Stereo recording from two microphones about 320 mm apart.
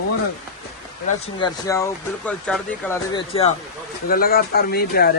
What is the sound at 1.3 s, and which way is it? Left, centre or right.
Speech, centre.